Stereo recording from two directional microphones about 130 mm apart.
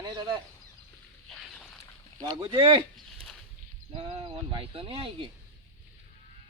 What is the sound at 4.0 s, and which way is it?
Speech, 45° right (ahead or behind).